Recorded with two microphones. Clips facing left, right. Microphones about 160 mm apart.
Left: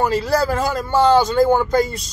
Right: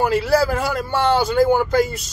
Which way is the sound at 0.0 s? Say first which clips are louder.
Right 1 dB; 5° right (ahead or behind).